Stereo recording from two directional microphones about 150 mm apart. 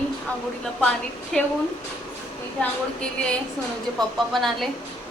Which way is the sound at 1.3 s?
5° left (ahead or behind).